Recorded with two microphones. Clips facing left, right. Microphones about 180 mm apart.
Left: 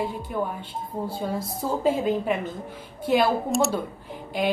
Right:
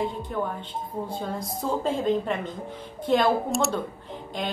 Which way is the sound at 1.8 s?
10° left (ahead or behind).